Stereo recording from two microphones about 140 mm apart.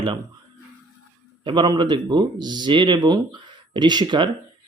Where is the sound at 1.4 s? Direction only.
30° right (ahead or behind).